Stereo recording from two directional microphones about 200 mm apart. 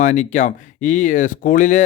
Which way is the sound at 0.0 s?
40° left (ahead or behind).